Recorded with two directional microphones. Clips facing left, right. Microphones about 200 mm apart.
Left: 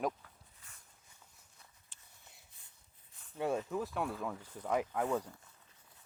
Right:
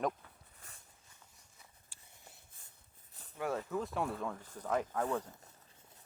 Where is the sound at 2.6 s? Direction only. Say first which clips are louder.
Right 4 dB; 50° right (ahead or behind).